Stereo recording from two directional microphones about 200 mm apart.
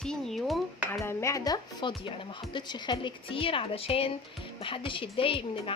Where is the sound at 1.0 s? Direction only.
15° left (ahead or behind).